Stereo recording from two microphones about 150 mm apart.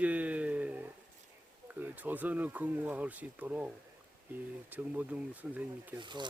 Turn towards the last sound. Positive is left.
turn(degrees=-30)  # may be behind; listen again after turning